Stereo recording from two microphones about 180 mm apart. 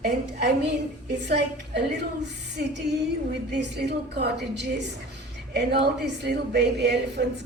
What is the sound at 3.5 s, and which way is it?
A woman's voice, 70° right (ahead or behind).